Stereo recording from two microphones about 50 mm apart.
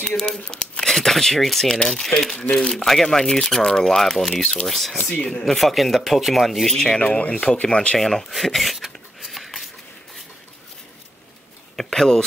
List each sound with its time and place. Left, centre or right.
0.0 s speech: centre
7.0 s speech: left
8.0 s a sound: centre
11.7 s speech: centre